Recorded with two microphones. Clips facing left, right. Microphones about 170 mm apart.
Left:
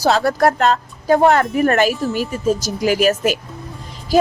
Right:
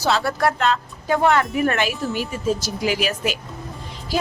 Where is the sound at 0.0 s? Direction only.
40° left (ahead or behind).